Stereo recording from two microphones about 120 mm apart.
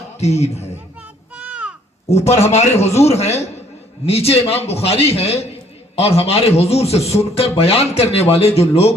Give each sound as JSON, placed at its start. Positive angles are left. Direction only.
{"t": 0.2, "sound": "speech", "side_deg": 65}
{"t": 1.4, "sound": "a sound", "side_deg": -10}
{"t": 2.0, "sound": "speech", "side_deg": 65}